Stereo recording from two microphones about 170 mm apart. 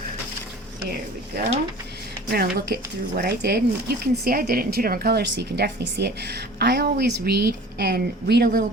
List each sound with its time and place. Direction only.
1.3 s speech: 70° right (ahead or behind)